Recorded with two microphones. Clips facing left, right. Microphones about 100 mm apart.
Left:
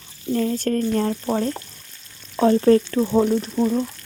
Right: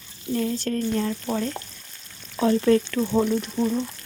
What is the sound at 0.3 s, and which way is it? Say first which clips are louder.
Speech: left 4 dB; 45° left (ahead or behind).